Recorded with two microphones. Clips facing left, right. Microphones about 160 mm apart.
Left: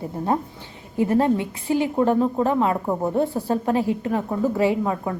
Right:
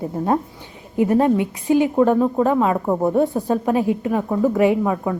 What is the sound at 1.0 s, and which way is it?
A woman's voice, 20° right (ahead or behind).